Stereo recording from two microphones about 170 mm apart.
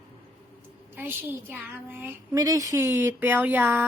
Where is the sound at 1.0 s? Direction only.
10° right (ahead or behind).